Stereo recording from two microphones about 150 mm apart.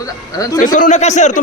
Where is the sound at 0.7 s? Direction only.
55° left (ahead or behind).